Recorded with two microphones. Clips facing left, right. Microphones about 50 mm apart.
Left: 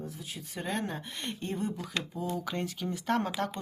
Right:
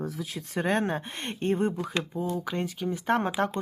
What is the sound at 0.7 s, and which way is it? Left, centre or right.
Speech, right.